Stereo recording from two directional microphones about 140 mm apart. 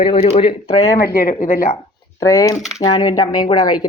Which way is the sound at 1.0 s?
90° left.